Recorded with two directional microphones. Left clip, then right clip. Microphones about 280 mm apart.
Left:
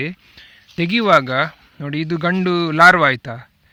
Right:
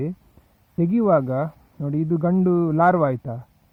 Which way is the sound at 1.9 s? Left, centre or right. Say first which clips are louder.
Left 3 dB; left.